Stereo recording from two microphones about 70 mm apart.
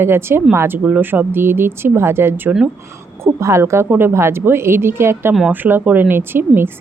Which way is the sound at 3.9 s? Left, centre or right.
Right.